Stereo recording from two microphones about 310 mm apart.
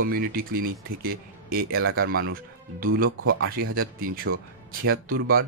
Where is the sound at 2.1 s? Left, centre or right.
Right.